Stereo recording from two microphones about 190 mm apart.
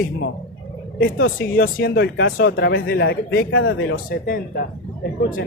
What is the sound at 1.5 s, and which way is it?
Speech, 55° left (ahead or behind).